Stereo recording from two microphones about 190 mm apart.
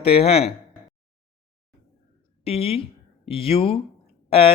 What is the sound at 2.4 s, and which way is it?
Speech, 30° left (ahead or behind).